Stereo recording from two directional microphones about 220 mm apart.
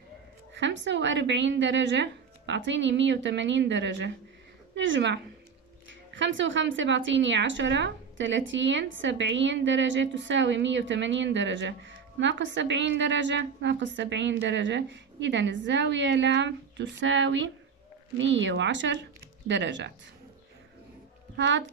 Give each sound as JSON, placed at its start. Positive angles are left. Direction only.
{"t": 0.6, "sound": "a woman's voice", "side_deg": -55}
{"t": 21.4, "sound": "a woman's voice", "side_deg": -55}